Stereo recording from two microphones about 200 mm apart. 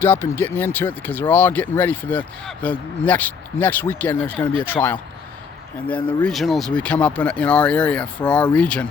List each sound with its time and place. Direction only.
0.0 s speech: 10° left (ahead or behind)
6.0 s speech: 25° left (ahead or behind)
6.2 s speech: centre (ahead or behind)